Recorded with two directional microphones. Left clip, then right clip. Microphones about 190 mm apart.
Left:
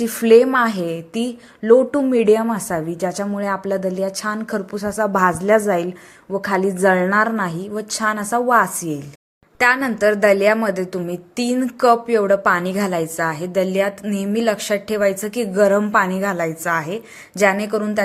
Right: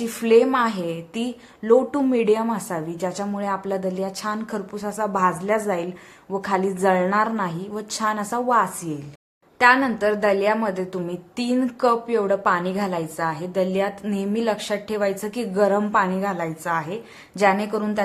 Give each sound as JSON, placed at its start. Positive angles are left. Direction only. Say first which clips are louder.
{"t": 0.0, "sound": "a woman's voice", "louder": "left 5 dB", "side_deg": 20}